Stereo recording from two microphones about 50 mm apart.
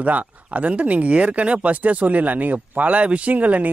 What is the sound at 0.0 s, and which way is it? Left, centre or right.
Speech, right.